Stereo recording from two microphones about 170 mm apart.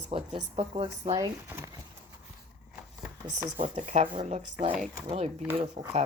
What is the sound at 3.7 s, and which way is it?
Speech, 45° right (ahead or behind).